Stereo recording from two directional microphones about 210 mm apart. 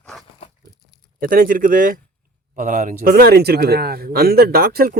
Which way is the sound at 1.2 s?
40° right (ahead or behind).